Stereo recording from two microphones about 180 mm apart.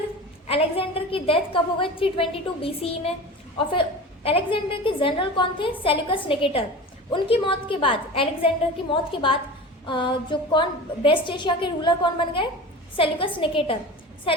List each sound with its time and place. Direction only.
0.4 s a woman's voice: 30° left (ahead or behind)